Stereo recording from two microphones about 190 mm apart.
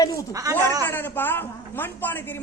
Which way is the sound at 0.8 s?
10° left (ahead or behind).